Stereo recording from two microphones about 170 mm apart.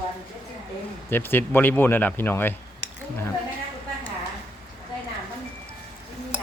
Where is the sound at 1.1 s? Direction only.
10° left (ahead or behind).